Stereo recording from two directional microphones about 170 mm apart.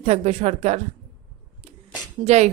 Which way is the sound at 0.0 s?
40° right (ahead or behind).